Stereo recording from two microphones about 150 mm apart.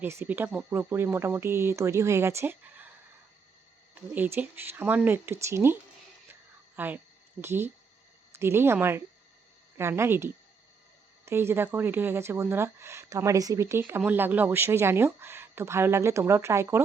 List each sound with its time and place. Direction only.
0.0 s speech: 15° right (ahead or behind)
4.1 s speech: 10° right (ahead or behind)
6.7 s speech: 10° right (ahead or behind)